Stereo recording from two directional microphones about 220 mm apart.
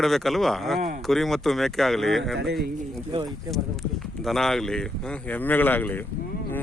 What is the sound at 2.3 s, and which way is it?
Speech, 55° right (ahead or behind).